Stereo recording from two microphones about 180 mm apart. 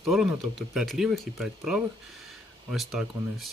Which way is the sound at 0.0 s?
Centre (ahead or behind).